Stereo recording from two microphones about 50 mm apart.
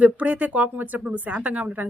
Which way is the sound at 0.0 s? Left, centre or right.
Right.